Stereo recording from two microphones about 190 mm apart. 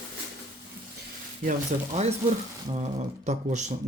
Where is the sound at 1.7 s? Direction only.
40° right (ahead or behind).